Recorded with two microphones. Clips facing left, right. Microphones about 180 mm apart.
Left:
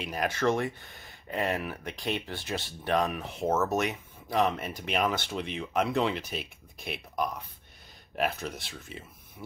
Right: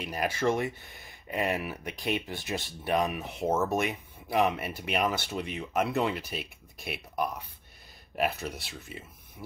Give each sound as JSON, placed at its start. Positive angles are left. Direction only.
{"t": 0.0, "sound": "speech", "side_deg": -5}